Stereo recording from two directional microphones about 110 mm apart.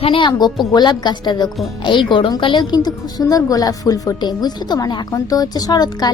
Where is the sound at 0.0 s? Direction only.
50° left (ahead or behind).